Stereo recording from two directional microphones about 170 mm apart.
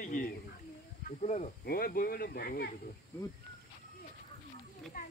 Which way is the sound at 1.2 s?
40° left (ahead or behind).